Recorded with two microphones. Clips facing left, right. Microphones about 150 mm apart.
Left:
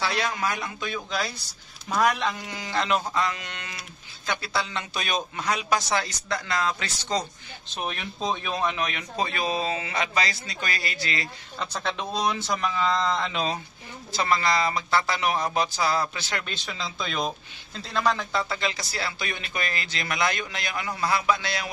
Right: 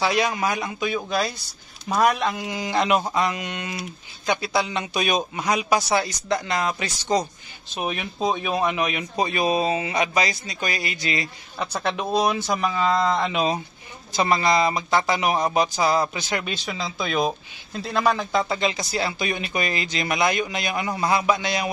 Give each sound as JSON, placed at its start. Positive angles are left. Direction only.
{"t": 0.0, "sound": "speech", "side_deg": -15}